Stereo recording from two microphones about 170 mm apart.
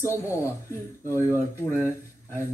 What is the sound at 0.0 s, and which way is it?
Speech, 15° left (ahead or behind).